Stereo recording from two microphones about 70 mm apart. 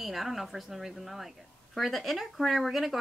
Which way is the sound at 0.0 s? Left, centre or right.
Centre.